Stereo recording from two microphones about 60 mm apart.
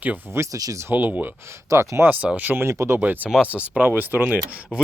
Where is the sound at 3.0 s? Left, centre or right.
Right.